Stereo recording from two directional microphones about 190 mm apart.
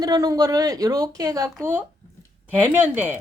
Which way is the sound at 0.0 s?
20° right (ahead or behind).